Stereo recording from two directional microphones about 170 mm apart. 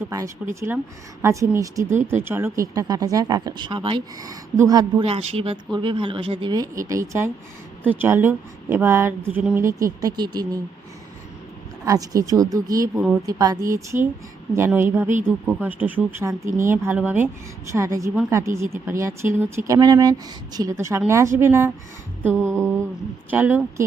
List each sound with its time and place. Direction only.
0.1 s speech: 15° right (ahead or behind)
5.0 s speech: 35° right (ahead or behind)
11.9 s speech: 20° right (ahead or behind)
23.3 s speech: 10° right (ahead or behind)